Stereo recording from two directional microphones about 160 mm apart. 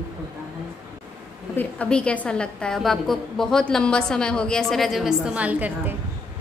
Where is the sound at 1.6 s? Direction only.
5° left (ahead or behind); by 5.9 s 10° right (ahead or behind).